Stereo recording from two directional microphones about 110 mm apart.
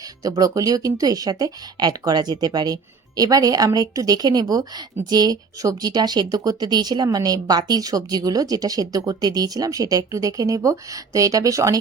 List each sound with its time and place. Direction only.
0.0 s speech: 35° right (ahead or behind)